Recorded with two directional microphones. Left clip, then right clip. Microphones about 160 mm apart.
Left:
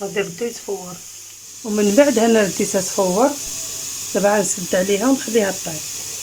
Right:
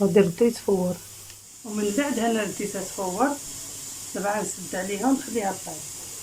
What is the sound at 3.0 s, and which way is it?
Speech, 75° left (ahead or behind).